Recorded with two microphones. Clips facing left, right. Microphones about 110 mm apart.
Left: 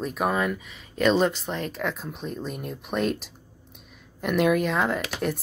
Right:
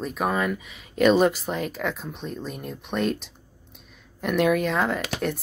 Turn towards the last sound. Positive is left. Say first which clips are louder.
# even
turn(degrees=0)  # may be behind; listen again after turning